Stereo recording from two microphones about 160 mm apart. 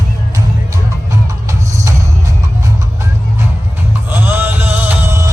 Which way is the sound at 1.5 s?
20° right (ahead or behind).